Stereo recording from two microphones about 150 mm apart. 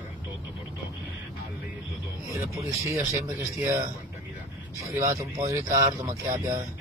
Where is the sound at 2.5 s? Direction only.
20° right (ahead or behind).